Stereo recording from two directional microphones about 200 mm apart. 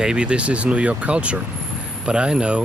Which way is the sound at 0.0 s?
5° right (ahead or behind).